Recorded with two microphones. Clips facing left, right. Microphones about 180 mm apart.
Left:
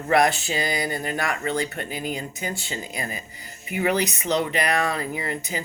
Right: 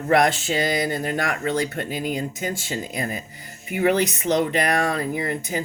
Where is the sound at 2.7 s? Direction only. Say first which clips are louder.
Right 4 dB; 50° right (ahead or behind).